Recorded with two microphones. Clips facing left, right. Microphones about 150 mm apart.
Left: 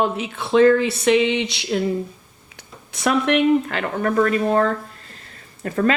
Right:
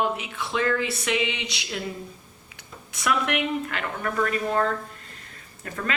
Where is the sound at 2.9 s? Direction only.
30° left (ahead or behind).